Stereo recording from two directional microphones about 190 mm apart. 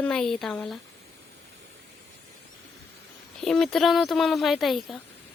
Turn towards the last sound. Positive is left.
turn(degrees=0)  # may be behind; listen again after turning